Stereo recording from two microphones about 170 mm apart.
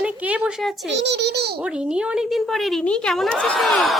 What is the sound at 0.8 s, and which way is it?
Speech, 90° right.